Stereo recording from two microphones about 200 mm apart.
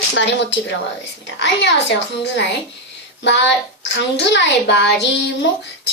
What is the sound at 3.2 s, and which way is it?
A child's voice, 60° left (ahead or behind).